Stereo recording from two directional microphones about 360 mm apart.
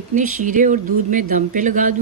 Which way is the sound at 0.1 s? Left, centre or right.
Right.